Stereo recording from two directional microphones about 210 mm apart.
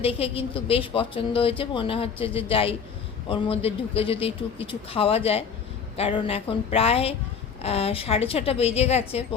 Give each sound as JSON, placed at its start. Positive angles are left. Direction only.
{"t": 0.0, "sound": "a woman's voice", "side_deg": 25}